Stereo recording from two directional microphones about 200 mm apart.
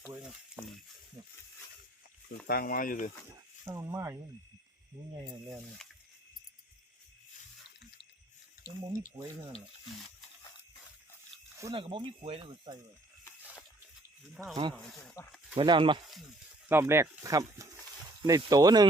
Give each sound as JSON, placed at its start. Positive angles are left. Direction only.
{"t": 0.1, "sound": "frying", "side_deg": -5}
{"t": 2.5, "sound": "speech", "side_deg": 45}
{"t": 3.6, "sound": "speech", "side_deg": -15}
{"t": 5.5, "sound": "speech", "side_deg": 0}
{"t": 8.9, "sound": "speech", "side_deg": -15}
{"t": 11.5, "sound": "speech", "side_deg": -20}
{"t": 14.5, "sound": "speech", "side_deg": -25}
{"t": 15.2, "sound": "speech", "side_deg": 15}
{"t": 15.5, "sound": "speech", "side_deg": -25}
{"t": 16.6, "sound": "speech", "side_deg": -10}